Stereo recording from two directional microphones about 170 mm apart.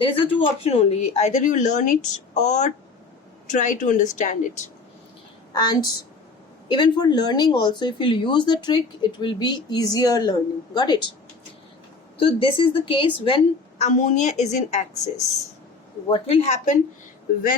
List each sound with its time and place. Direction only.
0.0 s speech: 30° left (ahead or behind)
5.5 s speech: 25° left (ahead or behind)
12.1 s a woman's voice: 30° left (ahead or behind)